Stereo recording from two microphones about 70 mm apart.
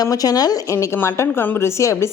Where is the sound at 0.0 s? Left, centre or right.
Left.